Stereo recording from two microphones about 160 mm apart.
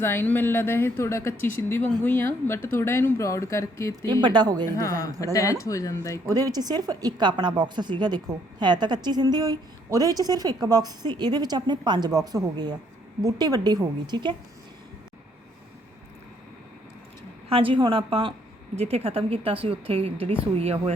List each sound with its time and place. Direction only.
0.0 s speech: 15° left (ahead or behind)
4.0 s a woman's voice: 30° right (ahead or behind)
4.8 s speech: 20° left (ahead or behind)
6.2 s a woman's voice: 25° right (ahead or behind)
17.5 s a woman's voice: 35° right (ahead or behind)